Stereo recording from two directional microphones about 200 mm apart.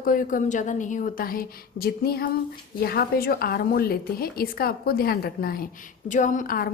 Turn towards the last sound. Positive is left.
turn(degrees=45)  # may be behind; listen again after turning